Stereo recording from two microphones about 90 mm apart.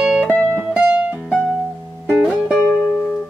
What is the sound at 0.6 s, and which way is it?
Music, 15° right (ahead or behind).